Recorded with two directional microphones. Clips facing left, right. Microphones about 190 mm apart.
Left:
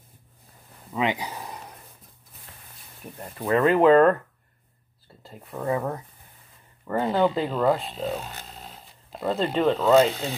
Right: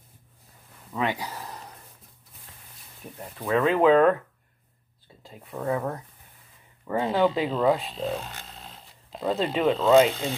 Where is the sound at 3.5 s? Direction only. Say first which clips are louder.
Left 2 dB; centre (ahead or behind).